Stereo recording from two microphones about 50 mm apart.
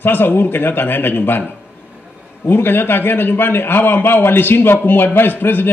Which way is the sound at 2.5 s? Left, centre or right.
Left.